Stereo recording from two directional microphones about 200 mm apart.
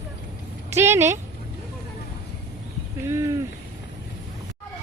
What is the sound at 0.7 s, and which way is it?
Speech, 15° right (ahead or behind).